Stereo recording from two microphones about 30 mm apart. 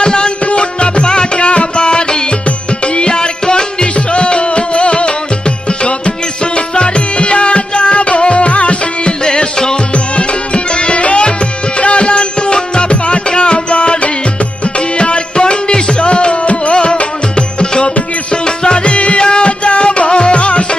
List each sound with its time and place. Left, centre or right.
0.0 s music: left
9.2 s music: left
9.9 s music: left